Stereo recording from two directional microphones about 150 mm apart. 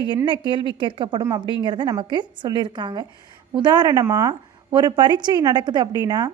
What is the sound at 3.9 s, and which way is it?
A woman's voice, 20° right (ahead or behind).